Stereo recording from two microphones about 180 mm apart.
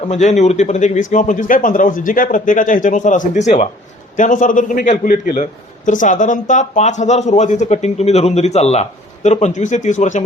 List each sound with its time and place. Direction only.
0.1 s a man's voice: 40° left (ahead or behind)